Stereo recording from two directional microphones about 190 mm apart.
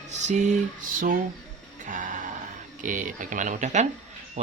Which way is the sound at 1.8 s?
40° right (ahead or behind).